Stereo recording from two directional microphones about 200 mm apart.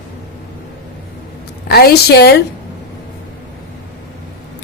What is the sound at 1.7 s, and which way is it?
Speech, 50° left (ahead or behind).